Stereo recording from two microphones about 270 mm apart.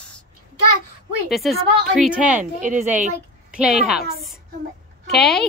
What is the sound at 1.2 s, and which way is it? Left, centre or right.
A woman's voice, centre.